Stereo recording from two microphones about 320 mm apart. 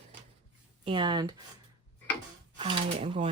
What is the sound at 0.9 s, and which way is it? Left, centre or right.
Speech, centre.